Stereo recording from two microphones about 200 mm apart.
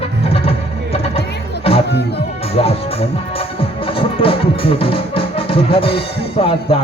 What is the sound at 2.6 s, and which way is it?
Speech, 30° left (ahead or behind).